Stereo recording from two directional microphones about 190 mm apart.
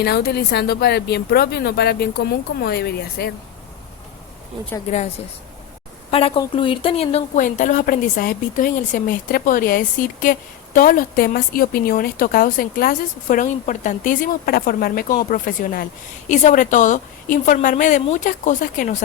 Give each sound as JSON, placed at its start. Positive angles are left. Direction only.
{"t": 0.0, "sound": "a woman's voice", "side_deg": 55}
{"t": 6.1, "sound": "speech", "side_deg": 30}